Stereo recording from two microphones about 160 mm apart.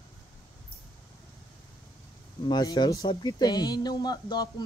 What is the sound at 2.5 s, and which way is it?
Speech, 25° left (ahead or behind).